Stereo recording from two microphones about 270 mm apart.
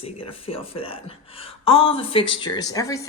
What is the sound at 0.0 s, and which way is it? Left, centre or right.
Speech, left.